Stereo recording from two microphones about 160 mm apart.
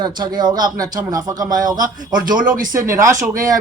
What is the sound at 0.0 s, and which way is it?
Speech, 25° right (ahead or behind).